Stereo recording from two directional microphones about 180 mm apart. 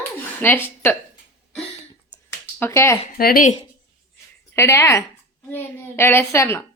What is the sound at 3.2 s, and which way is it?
Speech, 55° left (ahead or behind).